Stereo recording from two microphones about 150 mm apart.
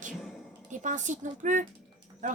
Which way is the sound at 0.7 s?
55° right (ahead or behind).